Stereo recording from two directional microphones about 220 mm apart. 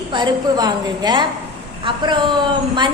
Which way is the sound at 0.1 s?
20° right (ahead or behind).